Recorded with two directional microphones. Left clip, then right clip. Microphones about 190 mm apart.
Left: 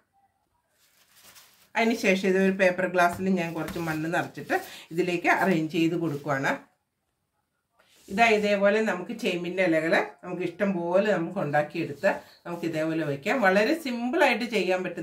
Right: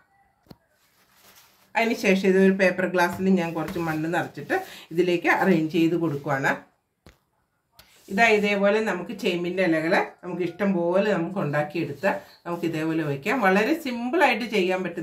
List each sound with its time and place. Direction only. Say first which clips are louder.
1.7 s speech: right 2 dB; 5° left (ahead or behind)
8.1 s speech: right 2 dB; centre (ahead or behind)